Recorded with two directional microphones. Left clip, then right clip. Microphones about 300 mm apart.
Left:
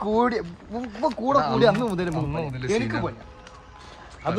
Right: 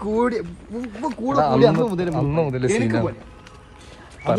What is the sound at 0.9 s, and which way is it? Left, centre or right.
Speech, left.